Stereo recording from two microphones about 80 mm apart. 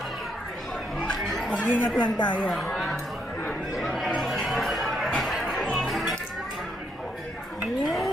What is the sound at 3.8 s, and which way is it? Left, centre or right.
Chatter, centre.